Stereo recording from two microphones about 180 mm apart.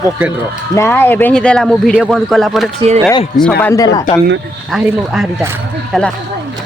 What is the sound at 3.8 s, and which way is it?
Speech, 20° left (ahead or behind).